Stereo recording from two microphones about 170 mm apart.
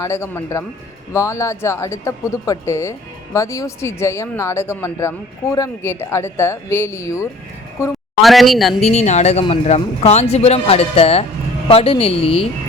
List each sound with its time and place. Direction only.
0.0 s speech: 15° left (ahead or behind)
8.2 s speech: centre (ahead or behind)
8.8 s speech: 40° left (ahead or behind)